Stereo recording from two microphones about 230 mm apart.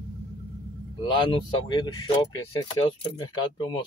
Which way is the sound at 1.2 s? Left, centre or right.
Left.